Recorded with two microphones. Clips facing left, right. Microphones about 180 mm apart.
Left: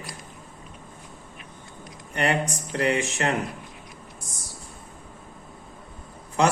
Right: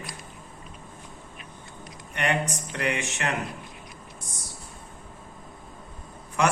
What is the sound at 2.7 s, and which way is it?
Speech, 35° left (ahead or behind).